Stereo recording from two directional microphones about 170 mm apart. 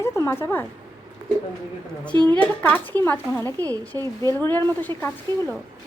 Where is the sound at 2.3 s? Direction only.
10° left (ahead or behind).